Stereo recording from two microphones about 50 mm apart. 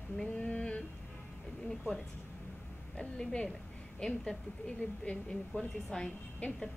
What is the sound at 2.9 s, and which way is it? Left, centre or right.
A woman's voice, centre.